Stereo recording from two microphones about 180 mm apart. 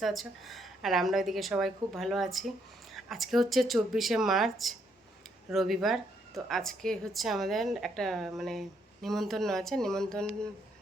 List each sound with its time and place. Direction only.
0.0 s a woman's voice: centre (ahead or behind)